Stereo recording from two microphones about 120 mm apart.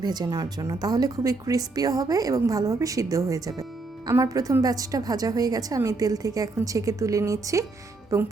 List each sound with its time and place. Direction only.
0.0 s a woman's voice: 35° right (ahead or behind)